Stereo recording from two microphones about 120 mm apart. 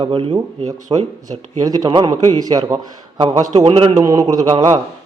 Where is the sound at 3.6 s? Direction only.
50° right (ahead or behind).